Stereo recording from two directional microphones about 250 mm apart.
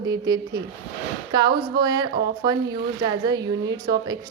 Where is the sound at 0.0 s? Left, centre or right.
Centre.